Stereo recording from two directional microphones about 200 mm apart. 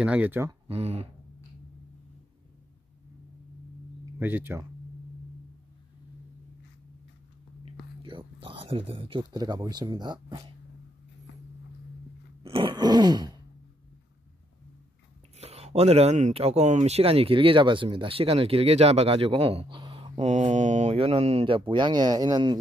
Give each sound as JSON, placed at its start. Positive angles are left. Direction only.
{"t": 0.0, "sound": "speech", "side_deg": -5}
{"t": 0.7, "sound": "speech", "side_deg": -30}
{"t": 4.0, "sound": "speech", "side_deg": -10}
{"t": 8.0, "sound": "speech", "side_deg": -25}
{"t": 12.4, "sound": "speech", "side_deg": -25}
{"t": 15.3, "sound": "speech", "side_deg": -30}